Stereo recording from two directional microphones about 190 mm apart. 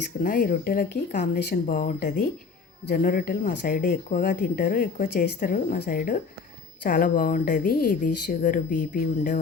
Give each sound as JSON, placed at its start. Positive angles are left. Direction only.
{"t": 0.2, "sound": "speech", "side_deg": 50}